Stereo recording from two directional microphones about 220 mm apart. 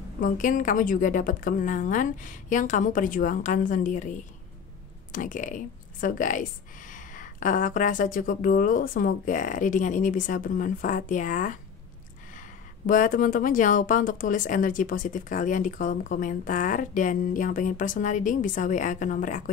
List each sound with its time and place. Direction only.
0.2 s a woman's voice: 35° left (ahead or behind)